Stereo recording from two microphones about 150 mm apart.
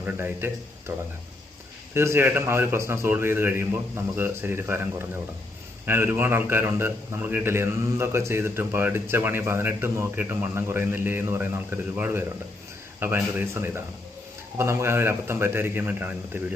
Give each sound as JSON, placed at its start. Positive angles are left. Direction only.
{"t": 0.0, "sound": "a man's voice", "side_deg": -15}